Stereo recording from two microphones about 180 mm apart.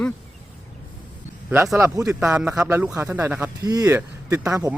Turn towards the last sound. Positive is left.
turn(degrees=-5)  # may be behind; listen again after turning